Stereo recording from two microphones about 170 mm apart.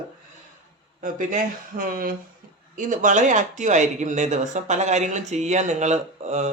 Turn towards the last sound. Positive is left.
turn(degrees=-40)  # may be behind; listen again after turning